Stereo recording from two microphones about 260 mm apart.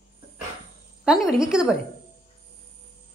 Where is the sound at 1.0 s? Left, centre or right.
Centre.